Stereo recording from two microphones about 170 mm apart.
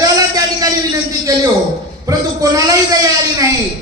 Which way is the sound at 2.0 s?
20° right (ahead or behind).